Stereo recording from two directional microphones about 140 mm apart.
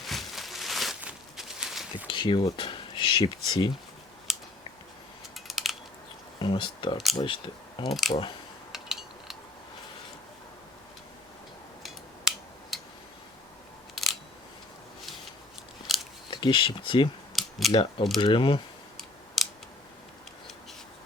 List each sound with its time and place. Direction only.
0.0 s a sound: centre (ahead or behind)
2.0 s speech: 35° left (ahead or behind)
4.3 s scissors: 5° right (ahead or behind)
5.5 s a sound: centre (ahead or behind)
6.4 s speech: 35° left (ahead or behind)
7.9 s speech: centre (ahead or behind)
8.7 s a sound: 5° right (ahead or behind)
13.9 s camera: centre (ahead or behind)
15.9 s chewing: centre (ahead or behind)
16.3 s speech: 35° left (ahead or behind)
17.3 s scissors: centre (ahead or behind)
17.7 s speech: 40° left (ahead or behind)